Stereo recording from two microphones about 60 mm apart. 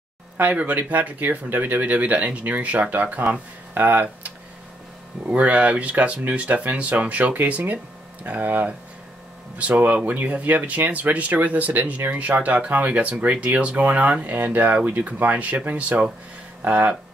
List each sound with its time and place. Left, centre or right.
0.4 s speech: right